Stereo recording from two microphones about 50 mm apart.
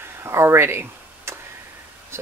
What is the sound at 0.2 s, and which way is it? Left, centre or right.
Speech, right.